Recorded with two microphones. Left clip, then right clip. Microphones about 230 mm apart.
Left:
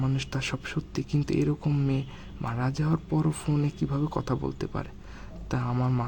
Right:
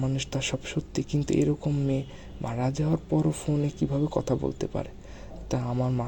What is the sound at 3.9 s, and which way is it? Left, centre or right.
Speech, left.